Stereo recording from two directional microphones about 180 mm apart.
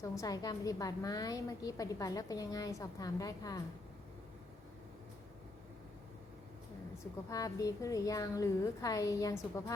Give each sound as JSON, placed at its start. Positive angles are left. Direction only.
{"t": 0.0, "sound": "a woman's voice", "side_deg": 20}
{"t": 7.3, "sound": "a woman's voice", "side_deg": 20}